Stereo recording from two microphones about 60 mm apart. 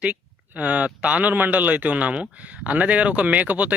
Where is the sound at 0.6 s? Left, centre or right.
Right.